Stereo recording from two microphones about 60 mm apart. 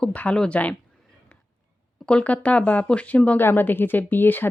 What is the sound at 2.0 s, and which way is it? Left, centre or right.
Speech, left.